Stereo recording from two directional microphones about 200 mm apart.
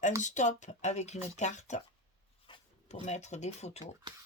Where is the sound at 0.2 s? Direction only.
35° left (ahead or behind).